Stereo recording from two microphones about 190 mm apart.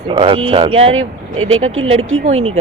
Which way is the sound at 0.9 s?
90° right.